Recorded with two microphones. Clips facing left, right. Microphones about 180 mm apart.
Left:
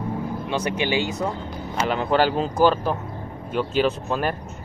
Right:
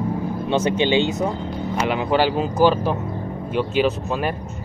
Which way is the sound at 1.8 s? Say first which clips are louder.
Right 1 dB; 5° right (ahead or behind).